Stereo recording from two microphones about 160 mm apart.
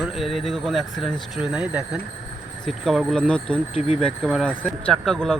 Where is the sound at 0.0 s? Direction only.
Centre (ahead or behind).